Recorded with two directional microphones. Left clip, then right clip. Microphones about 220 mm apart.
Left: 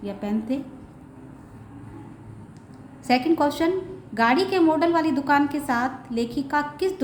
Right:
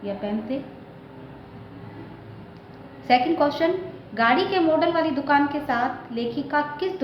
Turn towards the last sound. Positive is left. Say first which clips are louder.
# even
turn(degrees=40)  # may be behind; listen again after turning